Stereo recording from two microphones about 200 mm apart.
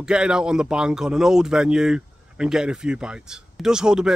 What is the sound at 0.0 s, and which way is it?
Speech, 5° right (ahead or behind).